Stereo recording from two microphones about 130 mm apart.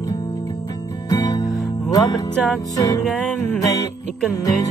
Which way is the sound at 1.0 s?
25° left (ahead or behind).